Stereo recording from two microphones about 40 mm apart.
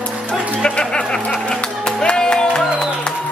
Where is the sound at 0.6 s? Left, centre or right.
Left.